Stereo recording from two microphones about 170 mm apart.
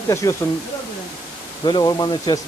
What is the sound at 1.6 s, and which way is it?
Speech, 25° left (ahead or behind).